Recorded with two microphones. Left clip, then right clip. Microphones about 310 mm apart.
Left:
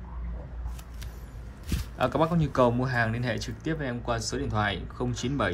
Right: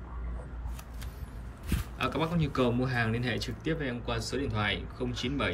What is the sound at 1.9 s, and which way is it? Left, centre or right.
A man's voice, centre.